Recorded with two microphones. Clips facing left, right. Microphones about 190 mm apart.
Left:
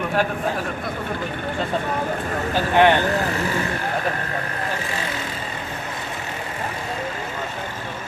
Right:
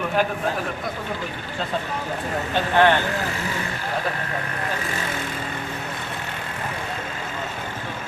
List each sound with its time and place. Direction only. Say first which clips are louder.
2.7 s speech: left 2 dB; 15° left (ahead or behind)